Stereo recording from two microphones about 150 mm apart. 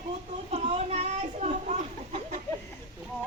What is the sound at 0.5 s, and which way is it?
A child's voice, 45° right (ahead or behind).